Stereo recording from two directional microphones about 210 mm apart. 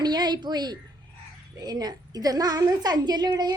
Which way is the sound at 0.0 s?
20° right (ahead or behind).